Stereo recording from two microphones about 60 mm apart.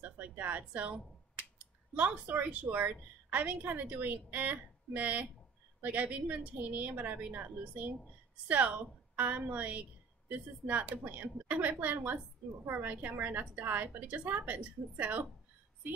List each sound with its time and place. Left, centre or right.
0.2 s a woman's voice: right